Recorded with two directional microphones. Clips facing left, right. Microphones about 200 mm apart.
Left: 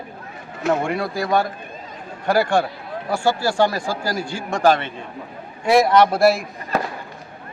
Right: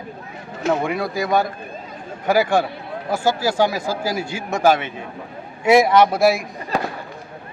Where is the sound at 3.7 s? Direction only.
5° right (ahead or behind).